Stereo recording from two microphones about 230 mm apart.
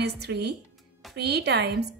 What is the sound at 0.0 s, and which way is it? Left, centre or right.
A woman's voice, right.